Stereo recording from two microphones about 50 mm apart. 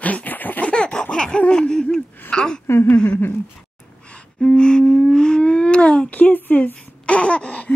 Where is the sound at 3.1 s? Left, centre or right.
Left.